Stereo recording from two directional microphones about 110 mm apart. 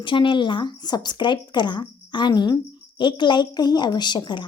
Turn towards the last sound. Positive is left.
turn(degrees=45)  # may be behind; listen again after turning